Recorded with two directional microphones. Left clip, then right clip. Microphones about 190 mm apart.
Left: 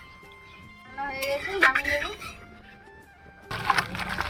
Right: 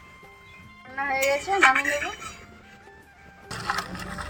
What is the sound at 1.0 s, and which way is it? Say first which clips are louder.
Music: right 6 dB; 35° right (ahead or behind).